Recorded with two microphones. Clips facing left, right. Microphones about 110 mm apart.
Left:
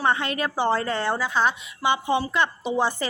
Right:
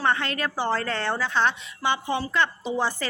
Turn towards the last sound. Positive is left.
turn(degrees=15)  # may be behind; listen again after turning